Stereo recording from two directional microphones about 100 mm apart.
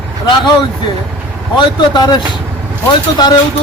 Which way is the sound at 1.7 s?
45° left (ahead or behind).